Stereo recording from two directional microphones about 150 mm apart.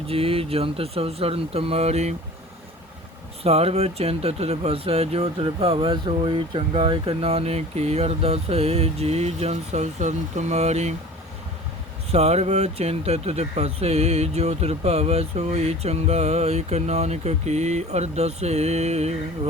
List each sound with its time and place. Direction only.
0.1 s speech: 40° right (ahead or behind)
3.4 s speech: 40° right (ahead or behind)
12.1 s speech: 45° right (ahead or behind)